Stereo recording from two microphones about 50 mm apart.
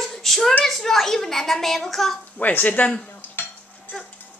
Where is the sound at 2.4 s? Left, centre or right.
Left.